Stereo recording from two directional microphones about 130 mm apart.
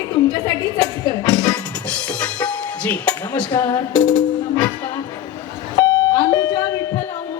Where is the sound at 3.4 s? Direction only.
30° left (ahead or behind).